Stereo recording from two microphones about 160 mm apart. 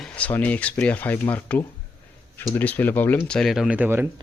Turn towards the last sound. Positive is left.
turn(degrees=-10)  # may be behind; listen again after turning